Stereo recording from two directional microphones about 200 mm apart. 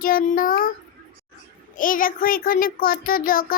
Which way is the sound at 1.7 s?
45° left (ahead or behind).